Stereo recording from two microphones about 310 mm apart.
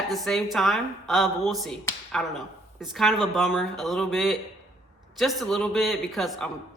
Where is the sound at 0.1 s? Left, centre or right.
Centre.